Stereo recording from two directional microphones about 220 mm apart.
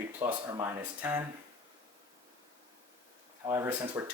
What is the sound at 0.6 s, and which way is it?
Speech, 10° right (ahead or behind).